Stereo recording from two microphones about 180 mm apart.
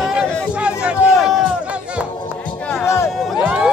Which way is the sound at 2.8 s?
15° left (ahead or behind).